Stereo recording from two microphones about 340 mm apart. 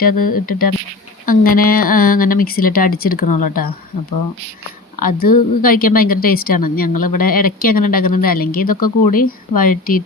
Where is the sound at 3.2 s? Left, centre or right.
Left.